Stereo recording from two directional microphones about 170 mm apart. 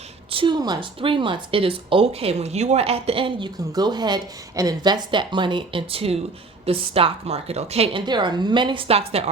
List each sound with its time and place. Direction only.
0.3 s speech: 30° right (ahead or behind)